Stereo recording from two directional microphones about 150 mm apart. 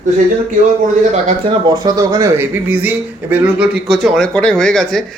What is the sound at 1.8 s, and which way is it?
Speech, 25° right (ahead or behind).